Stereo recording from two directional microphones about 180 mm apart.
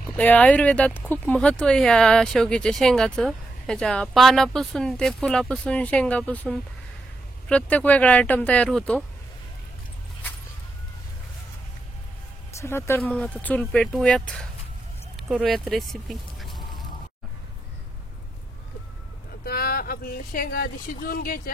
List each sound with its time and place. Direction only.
0.1 s speech: 10° left (ahead or behind)
12.5 s speech: 15° left (ahead or behind)
19.4 s speech: 55° left (ahead or behind)